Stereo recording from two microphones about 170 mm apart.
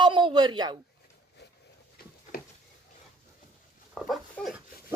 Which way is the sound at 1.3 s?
75° left (ahead or behind).